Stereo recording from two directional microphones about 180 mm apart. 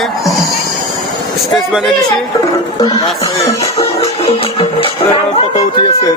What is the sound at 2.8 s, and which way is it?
Speech, 20° left (ahead or behind).